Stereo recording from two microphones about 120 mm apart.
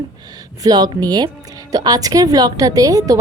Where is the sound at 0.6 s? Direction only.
35° right (ahead or behind).